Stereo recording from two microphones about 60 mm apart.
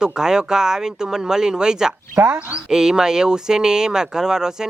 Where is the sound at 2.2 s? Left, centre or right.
Right.